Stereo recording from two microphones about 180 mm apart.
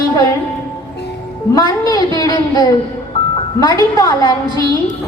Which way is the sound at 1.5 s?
20° left (ahead or behind).